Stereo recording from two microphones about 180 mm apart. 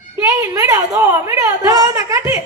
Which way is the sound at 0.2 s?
20° right (ahead or behind).